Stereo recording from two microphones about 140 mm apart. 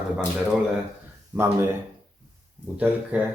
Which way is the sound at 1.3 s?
20° right (ahead or behind).